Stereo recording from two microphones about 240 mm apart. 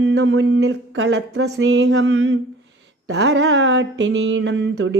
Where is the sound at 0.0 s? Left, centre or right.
Right.